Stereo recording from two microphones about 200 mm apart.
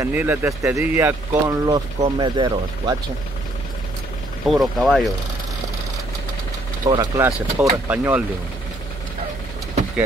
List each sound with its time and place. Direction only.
0.0 s speech: 10° right (ahead or behind)
4.5 s speech: centre (ahead or behind)
6.8 s speech: 20° right (ahead or behind)